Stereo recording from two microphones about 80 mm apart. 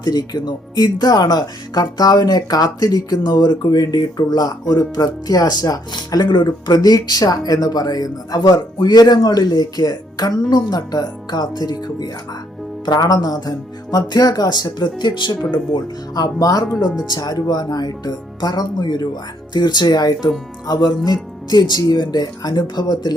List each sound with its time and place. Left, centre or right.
0.0 s speech: left
15.4 s speech: left
16.1 s speech: left